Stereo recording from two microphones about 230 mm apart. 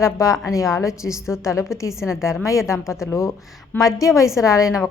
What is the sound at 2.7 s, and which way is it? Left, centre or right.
A woman's voice, centre.